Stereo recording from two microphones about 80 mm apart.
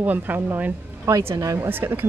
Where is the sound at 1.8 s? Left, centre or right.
Right.